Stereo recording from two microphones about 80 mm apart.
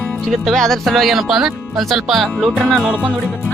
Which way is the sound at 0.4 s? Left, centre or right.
Centre.